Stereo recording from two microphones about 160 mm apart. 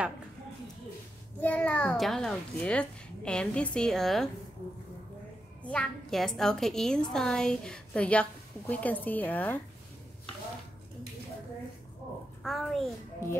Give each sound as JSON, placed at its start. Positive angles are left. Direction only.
{"t": 1.4, "sound": "a woman's voice", "side_deg": 10}
{"t": 5.6, "sound": "a woman's voice", "side_deg": 5}
{"t": 12.4, "sound": "a woman's voice", "side_deg": 0}
{"t": 13.2, "sound": "speech", "side_deg": 15}